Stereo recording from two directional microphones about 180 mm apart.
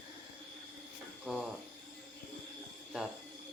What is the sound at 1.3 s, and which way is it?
Cricket, centre (ahead or behind).